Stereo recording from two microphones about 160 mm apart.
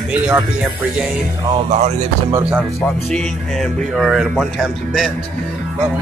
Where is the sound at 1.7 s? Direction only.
45° right (ahead or behind).